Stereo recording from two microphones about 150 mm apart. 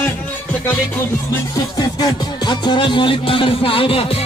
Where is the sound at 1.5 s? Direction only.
25° left (ahead or behind).